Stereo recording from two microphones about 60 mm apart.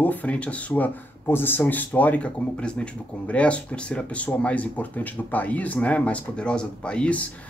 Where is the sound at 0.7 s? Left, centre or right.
Left; by 7.2 s centre.